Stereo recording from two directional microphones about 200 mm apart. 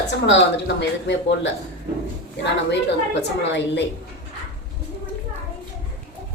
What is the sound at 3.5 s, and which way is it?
Speech, 60° left (ahead or behind).